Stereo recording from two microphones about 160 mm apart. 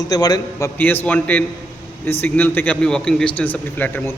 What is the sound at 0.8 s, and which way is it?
A man's voice, 10° left (ahead or behind).